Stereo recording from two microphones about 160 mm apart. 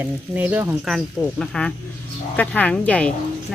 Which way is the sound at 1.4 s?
5° left (ahead or behind).